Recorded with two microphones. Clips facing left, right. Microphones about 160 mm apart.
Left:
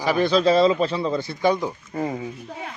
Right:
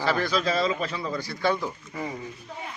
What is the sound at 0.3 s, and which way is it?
Speech, 30° left (ahead or behind).